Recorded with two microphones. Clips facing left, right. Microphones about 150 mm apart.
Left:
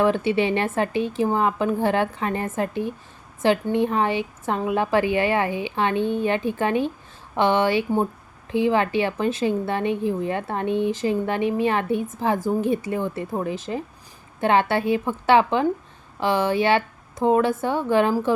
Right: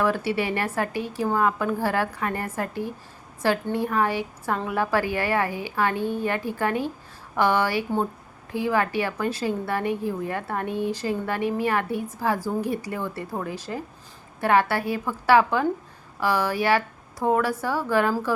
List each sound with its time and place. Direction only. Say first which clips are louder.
0.0 s a woman's voice: left 4 dB; 20° left (ahead or behind)